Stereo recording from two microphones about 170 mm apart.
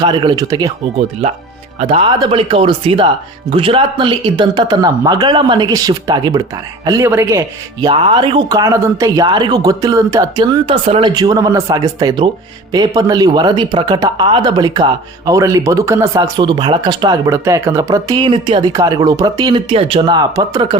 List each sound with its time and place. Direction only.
0.0 s speech: 25° right (ahead or behind)
1.8 s speech: 40° right (ahead or behind)
2.0 s speech: 25° right (ahead or behind)
11.1 s speech: 25° right (ahead or behind)